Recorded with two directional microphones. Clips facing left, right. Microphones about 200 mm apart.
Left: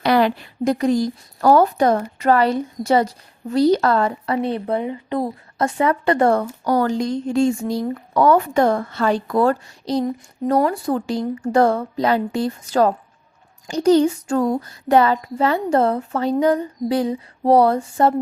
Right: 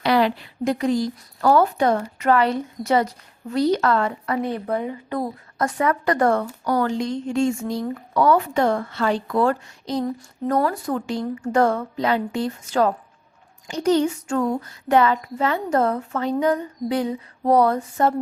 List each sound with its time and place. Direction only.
0.0 s child singing: 50° left (ahead or behind); by 18.1 s 30° left (ahead or behind)